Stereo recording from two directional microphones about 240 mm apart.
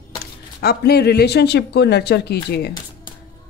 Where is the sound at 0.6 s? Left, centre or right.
Left.